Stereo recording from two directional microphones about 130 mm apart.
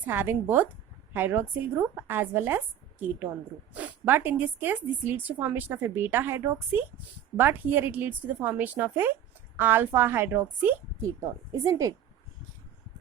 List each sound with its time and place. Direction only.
0.0 s a woman's voice: 15° right (ahead or behind)